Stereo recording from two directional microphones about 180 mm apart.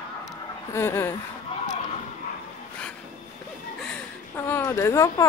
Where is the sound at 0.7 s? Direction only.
15° left (ahead or behind).